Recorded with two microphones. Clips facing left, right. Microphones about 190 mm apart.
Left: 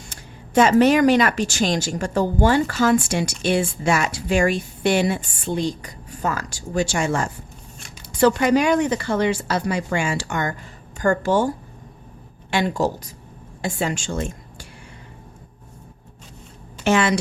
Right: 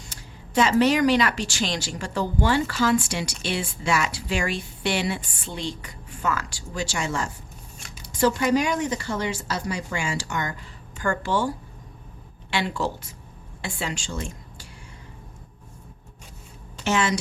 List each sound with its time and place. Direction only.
0.0 s speech: 50° left (ahead or behind)
8.2 s a woman's voice: 65° left (ahead or behind)
16.8 s a woman's voice: 60° left (ahead or behind)